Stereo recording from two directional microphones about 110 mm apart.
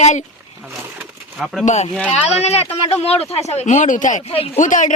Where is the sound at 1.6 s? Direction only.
90° left; by 4.4 s 70° left (ahead or behind).